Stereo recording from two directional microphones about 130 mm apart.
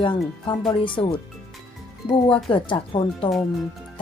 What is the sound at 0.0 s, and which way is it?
A woman's voice, 40° left (ahead or behind).